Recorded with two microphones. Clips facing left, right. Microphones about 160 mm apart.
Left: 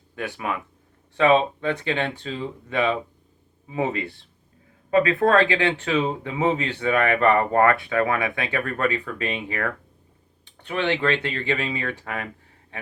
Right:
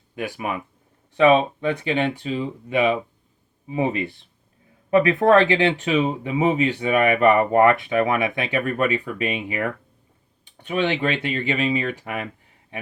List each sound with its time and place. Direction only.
0.2 s speech: 15° right (ahead or behind)